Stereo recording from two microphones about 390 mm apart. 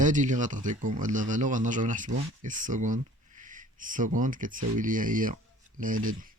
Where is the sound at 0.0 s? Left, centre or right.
Centre.